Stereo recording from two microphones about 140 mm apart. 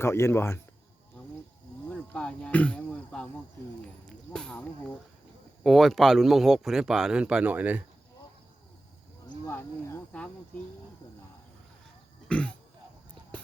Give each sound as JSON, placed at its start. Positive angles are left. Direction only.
{"t": 0.0, "sound": "speech", "side_deg": 20}
{"t": 1.9, "sound": "speech", "side_deg": 5}
{"t": 4.3, "sound": "speech", "side_deg": 5}
{"t": 5.6, "sound": "speech", "side_deg": 0}
{"t": 9.5, "sound": "speech", "side_deg": 15}
{"t": 12.3, "sound": "speech", "side_deg": 10}